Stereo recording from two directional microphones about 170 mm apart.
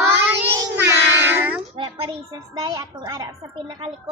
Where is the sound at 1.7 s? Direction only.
30° right (ahead or behind).